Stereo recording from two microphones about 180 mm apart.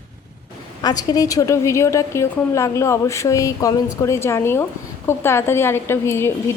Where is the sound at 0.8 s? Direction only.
20° left (ahead or behind).